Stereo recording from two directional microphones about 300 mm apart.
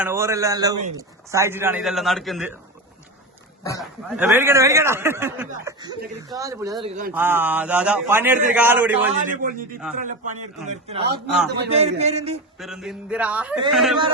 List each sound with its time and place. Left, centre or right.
0.0 s a man's voice: centre
3.6 s speech: centre
4.1 s a man's voice: centre
6.8 s a man's voice: right
7.1 s a man's voice: centre
9.2 s a man's voice: right
12.5 s a man's voice: centre